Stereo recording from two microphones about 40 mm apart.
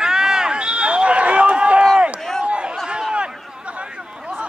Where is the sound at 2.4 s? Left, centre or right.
Right.